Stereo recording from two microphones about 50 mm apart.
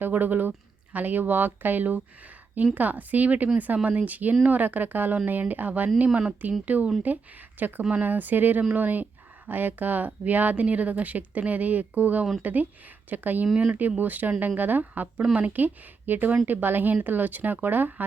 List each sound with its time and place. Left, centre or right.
0.0 s speech: right
7.8 s speech: right
8.0 s speech: right
15.0 s a woman's voice: centre
15.4 s speech: right